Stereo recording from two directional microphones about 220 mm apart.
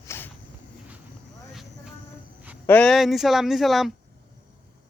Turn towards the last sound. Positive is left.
turn(degrees=0)  # may be behind; listen again after turning